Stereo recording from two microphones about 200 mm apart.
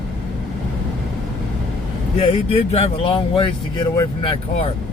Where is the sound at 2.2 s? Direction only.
30° left (ahead or behind).